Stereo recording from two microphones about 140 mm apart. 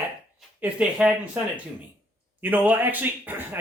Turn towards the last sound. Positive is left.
turn(degrees=-15)  # may be behind; listen again after turning